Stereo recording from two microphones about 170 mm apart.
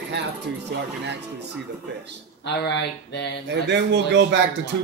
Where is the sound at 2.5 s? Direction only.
90° left.